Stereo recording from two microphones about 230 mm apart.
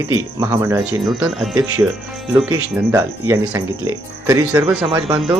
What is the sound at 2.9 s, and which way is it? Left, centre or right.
Speech, centre.